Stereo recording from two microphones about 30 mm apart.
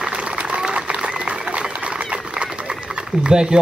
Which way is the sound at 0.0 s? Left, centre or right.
Right.